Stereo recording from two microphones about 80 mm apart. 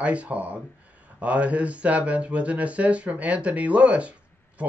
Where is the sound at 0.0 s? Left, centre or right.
Centre.